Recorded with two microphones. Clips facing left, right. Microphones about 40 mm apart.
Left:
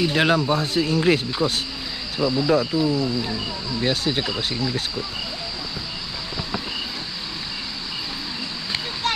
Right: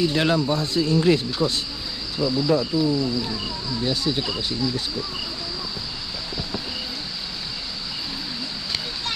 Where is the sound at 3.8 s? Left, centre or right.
Left.